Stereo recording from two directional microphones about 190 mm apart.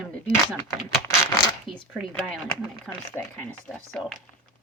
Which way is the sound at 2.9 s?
Centre (ahead or behind).